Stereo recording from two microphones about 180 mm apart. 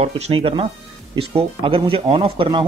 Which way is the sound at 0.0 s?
30° right (ahead or behind).